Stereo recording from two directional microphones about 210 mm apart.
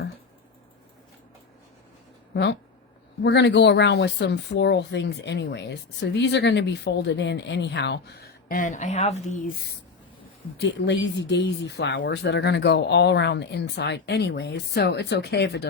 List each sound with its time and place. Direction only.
2.3 s speech: 55° left (ahead or behind); by 9.4 s 30° left (ahead or behind)
10.6 s speech: 55° left (ahead or behind)